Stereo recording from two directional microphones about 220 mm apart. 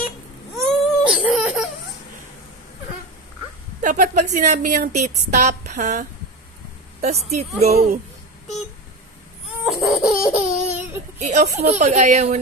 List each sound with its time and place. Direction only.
0.7 s whimper: centre (ahead or behind)
3.8 s a woman's voice: 35° right (ahead or behind)
9.7 s laughter: centre (ahead or behind)
11.1 s a woman's voice: 30° right (ahead or behind)